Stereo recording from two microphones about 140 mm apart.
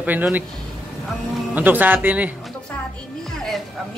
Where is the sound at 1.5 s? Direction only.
10° right (ahead or behind).